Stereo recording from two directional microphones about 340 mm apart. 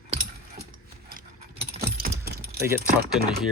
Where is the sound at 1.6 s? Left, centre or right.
Centre.